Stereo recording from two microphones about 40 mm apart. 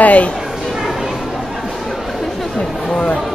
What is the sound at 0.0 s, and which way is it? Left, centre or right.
Speech, left.